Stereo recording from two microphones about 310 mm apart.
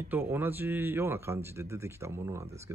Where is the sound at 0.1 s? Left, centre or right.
Centre.